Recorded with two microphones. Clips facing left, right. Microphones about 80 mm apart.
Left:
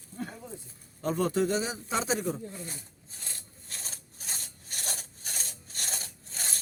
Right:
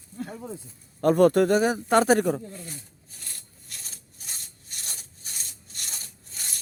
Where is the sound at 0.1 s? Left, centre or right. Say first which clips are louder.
Right 2 dB; left.